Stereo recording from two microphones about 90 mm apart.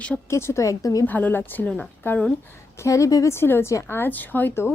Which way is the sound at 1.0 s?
20° left (ahead or behind).